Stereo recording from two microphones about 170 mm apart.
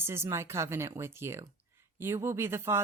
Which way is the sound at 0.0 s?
15° right (ahead or behind).